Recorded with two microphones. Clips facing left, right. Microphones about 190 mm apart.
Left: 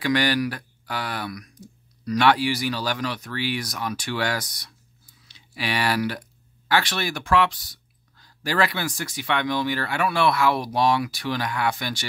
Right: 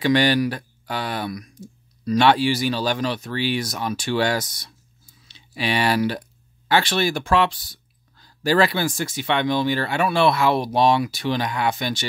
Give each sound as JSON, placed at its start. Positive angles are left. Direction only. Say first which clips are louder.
{"t": 0.0, "sound": "speech", "louder": "right 4 dB", "side_deg": -25}